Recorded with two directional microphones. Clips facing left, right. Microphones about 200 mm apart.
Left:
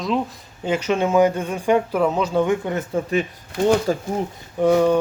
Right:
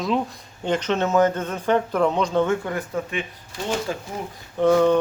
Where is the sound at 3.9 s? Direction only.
40° left (ahead or behind).